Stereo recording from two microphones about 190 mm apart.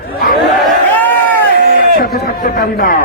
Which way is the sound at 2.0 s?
50° left (ahead or behind).